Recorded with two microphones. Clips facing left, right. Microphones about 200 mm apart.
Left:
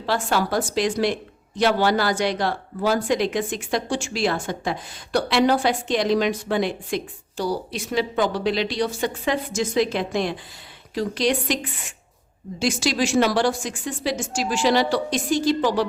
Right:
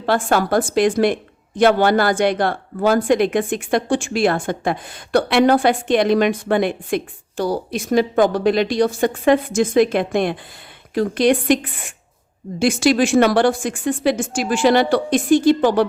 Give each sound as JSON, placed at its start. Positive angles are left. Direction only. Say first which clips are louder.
{"t": 0.0, "sound": "a woman's voice", "louder": "right 5 dB", "side_deg": -55}